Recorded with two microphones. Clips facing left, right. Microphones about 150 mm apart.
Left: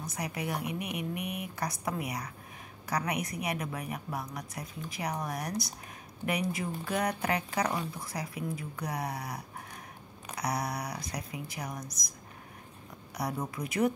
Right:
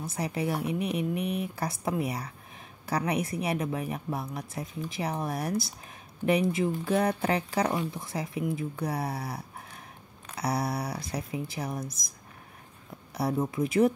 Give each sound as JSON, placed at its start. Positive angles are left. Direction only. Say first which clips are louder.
{"t": 0.0, "sound": "a woman's voice", "louder": "right 5 dB", "side_deg": -30}
{"t": 10.4, "sound": "a woman's voice", "louder": "right 4 dB", "side_deg": -30}
{"t": 13.1, "sound": "a woman's voice", "louder": "right 6 dB", "side_deg": -25}